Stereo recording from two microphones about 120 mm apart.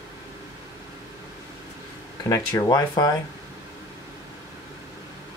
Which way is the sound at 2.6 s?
30° left (ahead or behind).